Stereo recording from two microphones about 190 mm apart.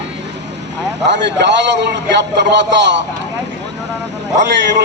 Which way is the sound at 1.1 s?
65° right (ahead or behind).